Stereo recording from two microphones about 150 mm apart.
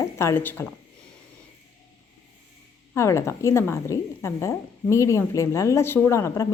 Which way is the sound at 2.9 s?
20° left (ahead or behind).